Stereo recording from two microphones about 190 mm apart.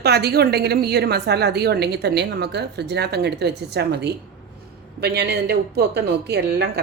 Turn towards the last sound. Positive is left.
turn(degrees=-60)  # may be behind; listen again after turning